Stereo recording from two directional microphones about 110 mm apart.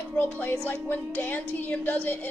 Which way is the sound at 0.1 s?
15° left (ahead or behind).